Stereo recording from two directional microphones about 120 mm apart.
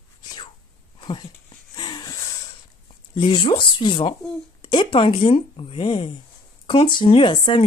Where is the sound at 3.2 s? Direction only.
45° left (ahead or behind).